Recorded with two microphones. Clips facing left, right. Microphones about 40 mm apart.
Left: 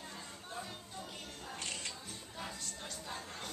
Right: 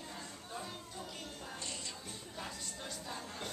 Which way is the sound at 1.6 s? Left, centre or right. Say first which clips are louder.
Left 4 dB; left.